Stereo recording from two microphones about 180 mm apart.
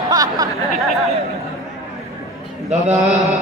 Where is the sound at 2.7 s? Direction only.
40° right (ahead or behind).